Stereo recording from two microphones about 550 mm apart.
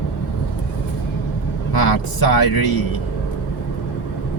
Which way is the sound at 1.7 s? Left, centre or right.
Left.